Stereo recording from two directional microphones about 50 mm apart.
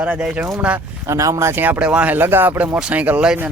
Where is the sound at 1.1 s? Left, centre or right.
Right.